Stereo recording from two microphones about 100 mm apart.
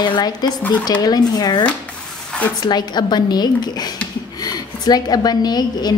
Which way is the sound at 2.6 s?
45° left (ahead or behind).